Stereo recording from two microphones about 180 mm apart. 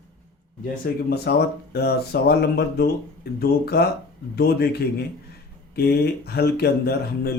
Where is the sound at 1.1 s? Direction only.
65° left (ahead or behind).